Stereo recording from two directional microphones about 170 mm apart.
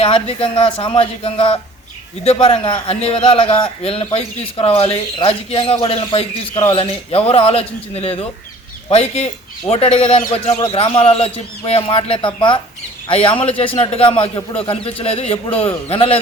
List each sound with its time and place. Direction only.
0.0 s a man's voice: 35° left (ahead or behind)